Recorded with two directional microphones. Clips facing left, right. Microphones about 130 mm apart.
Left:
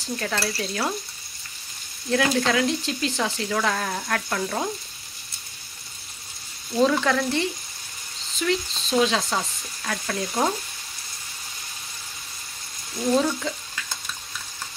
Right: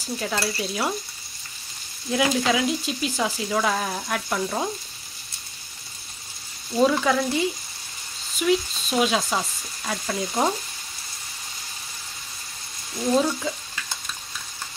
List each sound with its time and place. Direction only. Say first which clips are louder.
0.0 s speech: even; 10° right (ahead or behind)
2.0 s speech: even; 10° right (ahead or behind)
6.8 s speech: right 1 dB; 10° right (ahead or behind)
8.4 s stir: right 3 dB; 15° right (ahead or behind)
10.2 s speech: right 1 dB; centre (ahead or behind)
12.9 s speech: even; 5° right (ahead or behind)